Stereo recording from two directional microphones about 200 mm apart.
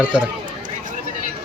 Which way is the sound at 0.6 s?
40° right (ahead or behind).